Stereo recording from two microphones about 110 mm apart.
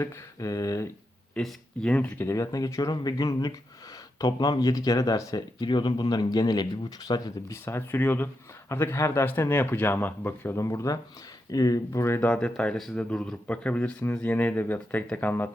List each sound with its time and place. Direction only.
0.0 s a man's voice: 30° left (ahead or behind)
1.3 s a man's voice: 5° left (ahead or behind); by 7.5 s 40° left (ahead or behind)
7.5 s a man's voice: 20° left (ahead or behind)
12.3 s speech: 10° left (ahead or behind)